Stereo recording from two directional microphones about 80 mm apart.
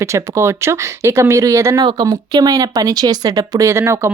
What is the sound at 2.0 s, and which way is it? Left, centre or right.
Speech, right.